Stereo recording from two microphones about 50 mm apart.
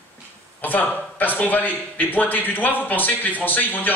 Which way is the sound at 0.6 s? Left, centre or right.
Left.